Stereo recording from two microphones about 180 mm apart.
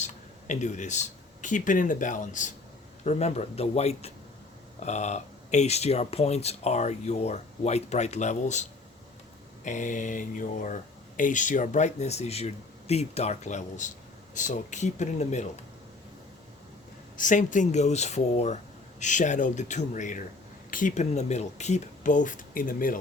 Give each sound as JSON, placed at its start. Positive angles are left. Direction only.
{"t": 0.0, "sound": "speech", "side_deg": 40}
{"t": 9.6, "sound": "speech", "side_deg": 45}
{"t": 17.2, "sound": "speech", "side_deg": 45}